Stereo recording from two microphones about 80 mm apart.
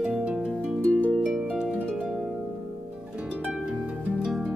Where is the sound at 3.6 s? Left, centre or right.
Centre.